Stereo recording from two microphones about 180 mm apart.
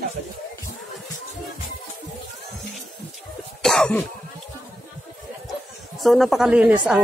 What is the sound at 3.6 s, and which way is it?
Cough, 5° left (ahead or behind).